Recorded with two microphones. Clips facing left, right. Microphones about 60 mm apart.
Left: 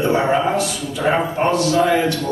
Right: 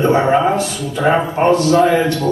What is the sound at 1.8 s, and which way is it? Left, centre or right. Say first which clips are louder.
Speech: right 3 dB; centre.